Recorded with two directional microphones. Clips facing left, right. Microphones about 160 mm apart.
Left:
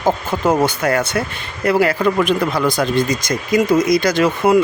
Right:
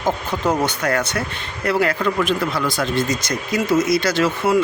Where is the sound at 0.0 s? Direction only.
10° left (ahead or behind).